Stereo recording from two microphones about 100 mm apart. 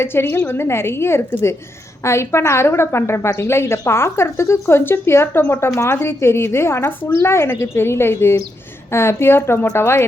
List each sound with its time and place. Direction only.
0.0 s a woman's voice: 25° left (ahead or behind)